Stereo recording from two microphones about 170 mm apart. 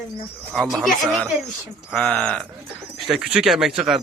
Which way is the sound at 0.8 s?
Centre (ahead or behind).